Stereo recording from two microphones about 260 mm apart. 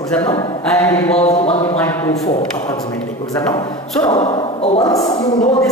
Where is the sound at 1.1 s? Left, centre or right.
Left.